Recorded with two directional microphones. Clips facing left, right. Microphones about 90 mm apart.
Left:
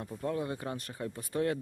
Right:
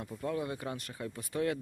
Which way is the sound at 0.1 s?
30° left (ahead or behind).